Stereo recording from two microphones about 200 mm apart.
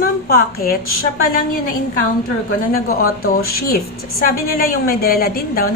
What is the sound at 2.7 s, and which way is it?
A woman's voice, 45° left (ahead or behind).